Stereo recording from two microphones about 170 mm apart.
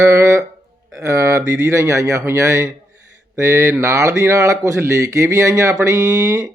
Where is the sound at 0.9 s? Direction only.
15° right (ahead or behind).